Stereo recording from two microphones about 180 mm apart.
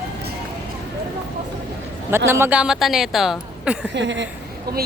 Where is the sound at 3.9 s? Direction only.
80° right.